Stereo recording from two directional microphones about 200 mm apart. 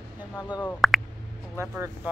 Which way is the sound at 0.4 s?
15° left (ahead or behind).